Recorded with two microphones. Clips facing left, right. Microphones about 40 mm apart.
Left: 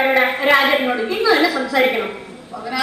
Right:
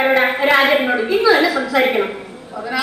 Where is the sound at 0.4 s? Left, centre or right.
Centre.